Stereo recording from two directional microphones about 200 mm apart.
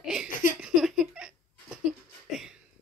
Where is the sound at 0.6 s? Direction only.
5° right (ahead or behind).